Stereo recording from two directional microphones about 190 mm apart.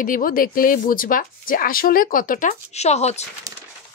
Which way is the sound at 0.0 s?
45° left (ahead or behind).